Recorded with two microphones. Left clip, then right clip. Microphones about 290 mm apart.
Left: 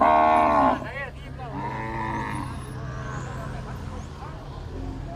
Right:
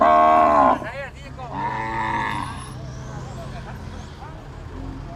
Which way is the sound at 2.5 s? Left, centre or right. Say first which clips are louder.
Right 2 dB; centre.